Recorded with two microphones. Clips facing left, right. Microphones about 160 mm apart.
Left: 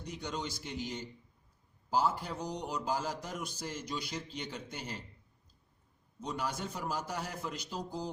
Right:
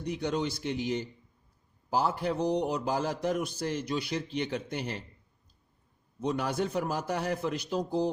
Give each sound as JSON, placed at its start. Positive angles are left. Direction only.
{"t": 0.0, "sound": "a man's voice", "side_deg": -65}
{"t": 6.1, "sound": "a man's voice", "side_deg": -60}